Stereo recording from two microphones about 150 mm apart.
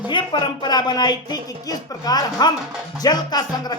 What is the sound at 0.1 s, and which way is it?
Speech, 30° left (ahead or behind).